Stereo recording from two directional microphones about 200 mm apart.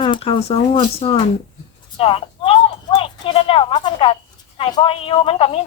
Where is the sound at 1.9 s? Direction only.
25° left (ahead or behind).